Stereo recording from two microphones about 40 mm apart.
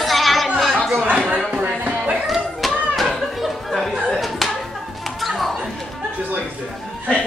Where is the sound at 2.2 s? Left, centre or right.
Centre.